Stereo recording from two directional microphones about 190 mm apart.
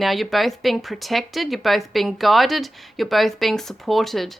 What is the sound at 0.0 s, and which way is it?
Speech, centre (ahead or behind).